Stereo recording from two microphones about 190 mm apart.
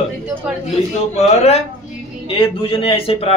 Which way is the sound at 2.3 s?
30° left (ahead or behind).